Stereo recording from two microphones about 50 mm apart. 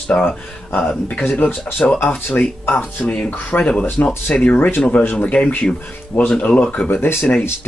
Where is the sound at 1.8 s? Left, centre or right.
Left.